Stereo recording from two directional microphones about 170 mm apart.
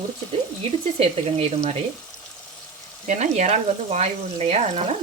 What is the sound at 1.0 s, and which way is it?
Speech, 40° right (ahead or behind).